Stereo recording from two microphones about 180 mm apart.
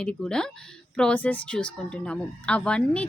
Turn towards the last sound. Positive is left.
turn(degrees=5)  # may be behind; listen again after turning